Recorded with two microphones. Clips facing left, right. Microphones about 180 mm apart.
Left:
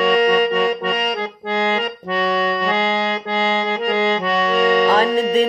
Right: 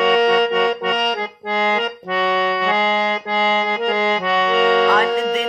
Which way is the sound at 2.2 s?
35° left (ahead or behind).